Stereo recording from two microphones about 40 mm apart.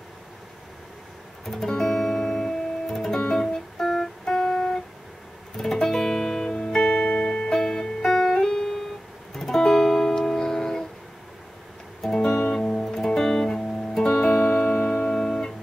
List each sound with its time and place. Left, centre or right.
1.4 s music: centre
3.8 s music: centre; by 6.9 s left
6.9 s music: left; by 10.9 s centre
12.1 s music: centre